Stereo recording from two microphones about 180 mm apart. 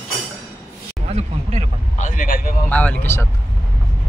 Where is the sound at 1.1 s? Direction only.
35° right (ahead or behind).